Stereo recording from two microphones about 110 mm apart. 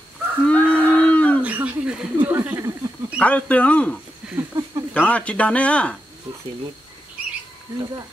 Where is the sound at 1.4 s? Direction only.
15° right (ahead or behind).